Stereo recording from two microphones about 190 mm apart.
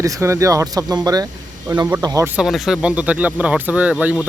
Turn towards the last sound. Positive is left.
turn(degrees=-5)  # may be behind; listen again after turning